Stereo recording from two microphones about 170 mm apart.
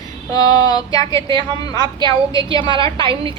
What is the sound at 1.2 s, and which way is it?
A woman's voice, 25° right (ahead or behind).